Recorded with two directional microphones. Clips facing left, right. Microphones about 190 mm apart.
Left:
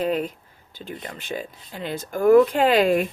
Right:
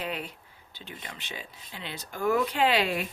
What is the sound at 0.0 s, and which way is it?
Speech, 45° left (ahead or behind).